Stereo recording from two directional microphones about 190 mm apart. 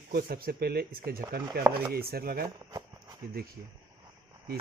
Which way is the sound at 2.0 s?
55° right (ahead or behind).